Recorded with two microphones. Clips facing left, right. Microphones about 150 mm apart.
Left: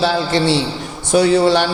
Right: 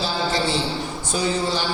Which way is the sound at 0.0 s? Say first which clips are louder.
Left 7 dB; 75° left (ahead or behind).